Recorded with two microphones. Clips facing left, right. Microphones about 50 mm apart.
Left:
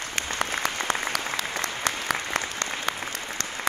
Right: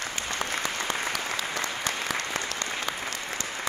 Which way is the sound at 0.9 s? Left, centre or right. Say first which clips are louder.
Left 2 dB; left.